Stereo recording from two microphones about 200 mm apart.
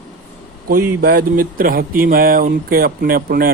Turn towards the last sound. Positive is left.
turn(degrees=-50)  # may be behind; listen again after turning